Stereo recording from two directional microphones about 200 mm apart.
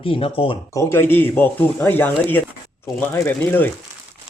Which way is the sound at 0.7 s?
15° left (ahead or behind).